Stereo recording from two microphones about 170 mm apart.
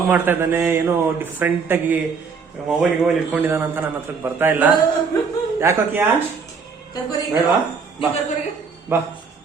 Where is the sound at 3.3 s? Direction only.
10° right (ahead or behind).